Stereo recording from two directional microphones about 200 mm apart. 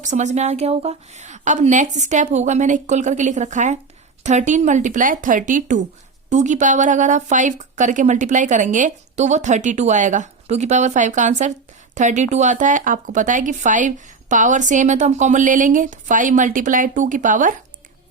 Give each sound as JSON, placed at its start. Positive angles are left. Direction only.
{"t": 0.0, "sound": "a woman's voice", "side_deg": -35}